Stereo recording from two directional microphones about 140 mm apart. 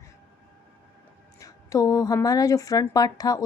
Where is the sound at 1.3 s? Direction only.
25° left (ahead or behind).